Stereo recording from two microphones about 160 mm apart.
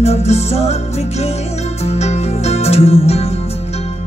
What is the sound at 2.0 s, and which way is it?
Music, 40° left (ahead or behind).